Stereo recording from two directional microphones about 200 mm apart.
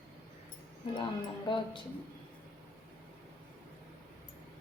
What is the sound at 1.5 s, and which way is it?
Speech, 25° left (ahead or behind).